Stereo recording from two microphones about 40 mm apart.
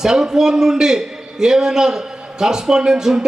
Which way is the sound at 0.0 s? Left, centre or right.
Centre.